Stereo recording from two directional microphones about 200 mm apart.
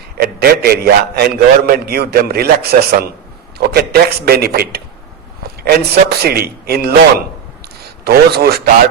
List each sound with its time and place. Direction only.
0.2 s a man's voice: 50° right (ahead or behind)